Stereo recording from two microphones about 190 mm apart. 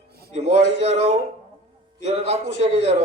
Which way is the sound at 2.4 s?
65° left (ahead or behind).